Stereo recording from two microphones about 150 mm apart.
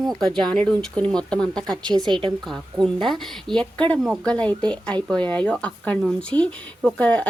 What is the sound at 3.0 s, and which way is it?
A woman's voice, centre (ahead or behind).